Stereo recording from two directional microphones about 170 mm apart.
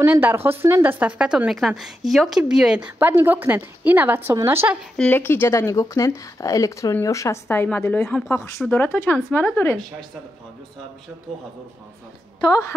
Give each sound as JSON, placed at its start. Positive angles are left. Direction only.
{"t": 0.0, "sound": "speech", "side_deg": -10}
{"t": 4.9, "sound": "speech", "side_deg": 10}
{"t": 8.4, "sound": "speech", "side_deg": 15}
{"t": 12.4, "sound": "a woman's voice", "side_deg": 20}